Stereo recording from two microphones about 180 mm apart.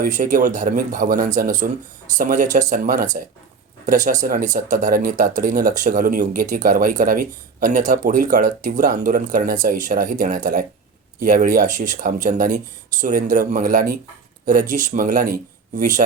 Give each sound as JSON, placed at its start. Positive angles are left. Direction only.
{"t": 0.0, "sound": "speech", "side_deg": -45}